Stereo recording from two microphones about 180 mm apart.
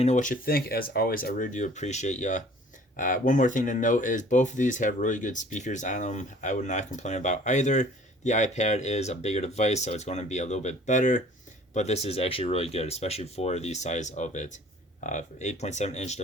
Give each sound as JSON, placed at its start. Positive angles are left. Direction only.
{"t": 0.0, "sound": "speech", "side_deg": 40}